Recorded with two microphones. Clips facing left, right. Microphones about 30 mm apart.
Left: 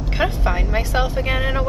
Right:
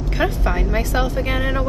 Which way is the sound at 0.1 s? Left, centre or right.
Centre.